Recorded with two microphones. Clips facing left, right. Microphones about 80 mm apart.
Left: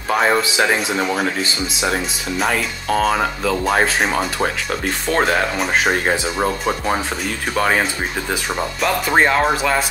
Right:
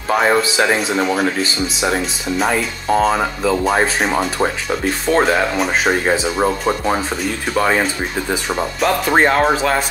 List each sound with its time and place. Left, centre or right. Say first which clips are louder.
0.1 s speech: right 2 dB; centre
2.5 s speech: right 3 dB; centre
3.2 s speech: right 2 dB; centre
9.1 s speech: right 1 dB; centre